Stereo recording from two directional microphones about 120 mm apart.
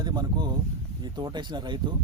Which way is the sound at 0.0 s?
35° right (ahead or behind).